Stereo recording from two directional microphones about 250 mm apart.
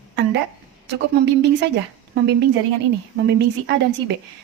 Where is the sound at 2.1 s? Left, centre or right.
Right.